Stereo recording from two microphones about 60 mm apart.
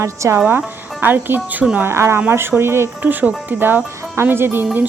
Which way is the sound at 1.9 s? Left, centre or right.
Right.